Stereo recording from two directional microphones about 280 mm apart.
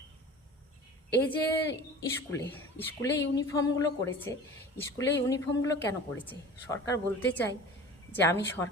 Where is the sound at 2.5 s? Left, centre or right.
Centre.